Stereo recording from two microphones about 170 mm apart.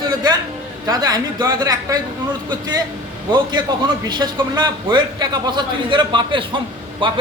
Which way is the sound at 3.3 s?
25° right (ahead or behind).